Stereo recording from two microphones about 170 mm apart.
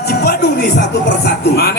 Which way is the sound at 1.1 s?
75° left (ahead or behind).